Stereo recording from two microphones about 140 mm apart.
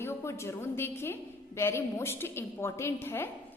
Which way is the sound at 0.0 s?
20° left (ahead or behind).